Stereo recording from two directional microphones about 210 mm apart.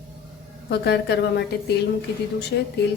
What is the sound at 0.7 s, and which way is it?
A woman's voice, 50° left (ahead or behind).